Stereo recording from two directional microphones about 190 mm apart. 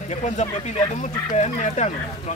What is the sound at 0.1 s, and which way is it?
Speech, 35° left (ahead or behind).